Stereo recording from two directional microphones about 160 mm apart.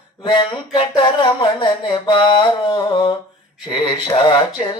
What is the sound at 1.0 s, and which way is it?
Mantra, 30° left (ahead or behind).